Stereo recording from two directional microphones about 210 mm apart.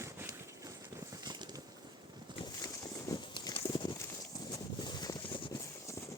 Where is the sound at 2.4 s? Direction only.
20° left (ahead or behind).